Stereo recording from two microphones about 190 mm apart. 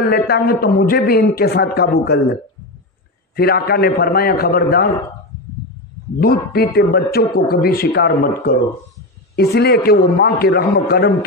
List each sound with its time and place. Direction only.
0.1 s a man's voice: 55° left (ahead or behind)
3.3 s a man's voice: 55° left (ahead or behind)
6.1 s a man's voice: 55° left (ahead or behind)
9.3 s a man's voice: 55° left (ahead or behind)